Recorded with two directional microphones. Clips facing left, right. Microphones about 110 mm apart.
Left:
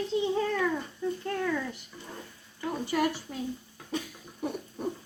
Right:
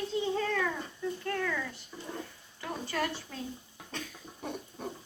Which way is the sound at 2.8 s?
15° left (ahead or behind).